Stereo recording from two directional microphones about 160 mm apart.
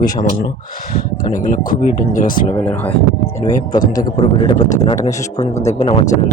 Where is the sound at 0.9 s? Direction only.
60° left (ahead or behind).